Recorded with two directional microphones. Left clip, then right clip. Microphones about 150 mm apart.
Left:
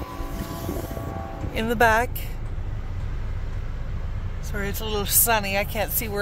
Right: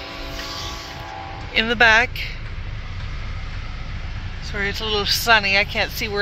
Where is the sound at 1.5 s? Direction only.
15° left (ahead or behind).